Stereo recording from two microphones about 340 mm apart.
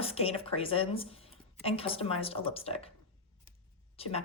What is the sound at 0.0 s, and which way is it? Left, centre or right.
Speech, centre.